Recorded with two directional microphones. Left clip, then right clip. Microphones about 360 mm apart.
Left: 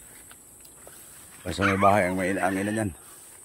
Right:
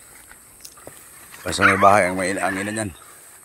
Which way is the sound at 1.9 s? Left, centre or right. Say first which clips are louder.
Right 6 dB; centre.